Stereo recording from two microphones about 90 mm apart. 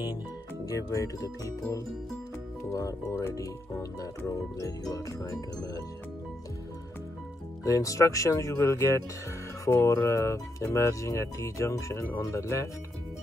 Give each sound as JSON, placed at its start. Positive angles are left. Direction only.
{"t": 0.7, "sound": "speech", "side_deg": 35}
{"t": 7.6, "sound": "speech", "side_deg": 40}